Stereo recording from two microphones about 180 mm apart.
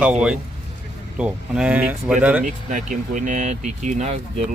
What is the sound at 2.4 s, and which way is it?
Speech, 45° right (ahead or behind).